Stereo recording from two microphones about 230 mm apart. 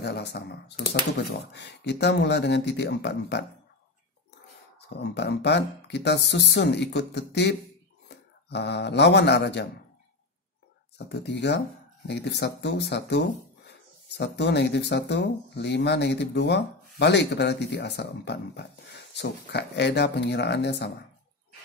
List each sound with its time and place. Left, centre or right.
0.0 s speech: left
4.8 s speech: left
11.1 s speech: left